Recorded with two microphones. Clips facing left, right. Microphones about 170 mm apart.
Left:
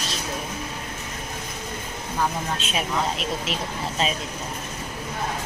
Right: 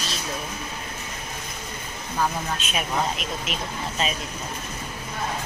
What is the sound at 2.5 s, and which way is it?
Speech, 25° left (ahead or behind).